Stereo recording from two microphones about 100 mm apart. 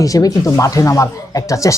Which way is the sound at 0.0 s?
35° left (ahead or behind).